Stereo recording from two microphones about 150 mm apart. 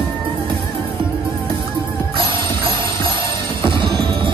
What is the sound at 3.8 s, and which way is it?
Music, 35° right (ahead or behind).